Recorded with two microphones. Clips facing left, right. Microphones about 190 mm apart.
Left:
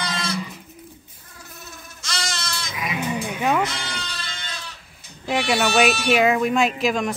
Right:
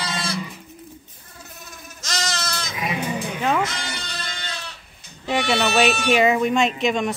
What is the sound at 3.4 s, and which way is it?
Sheep, 5° left (ahead or behind).